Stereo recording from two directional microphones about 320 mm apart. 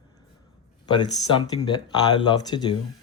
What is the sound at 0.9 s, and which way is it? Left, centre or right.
Speech, centre.